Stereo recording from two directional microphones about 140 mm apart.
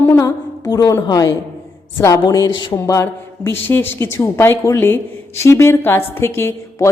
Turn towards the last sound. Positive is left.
turn(degrees=20)  # may be behind; listen again after turning